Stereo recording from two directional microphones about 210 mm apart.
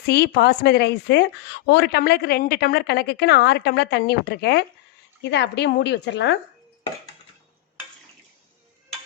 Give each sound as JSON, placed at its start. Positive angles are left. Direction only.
{"t": 0.1, "sound": "a woman's voice", "side_deg": 50}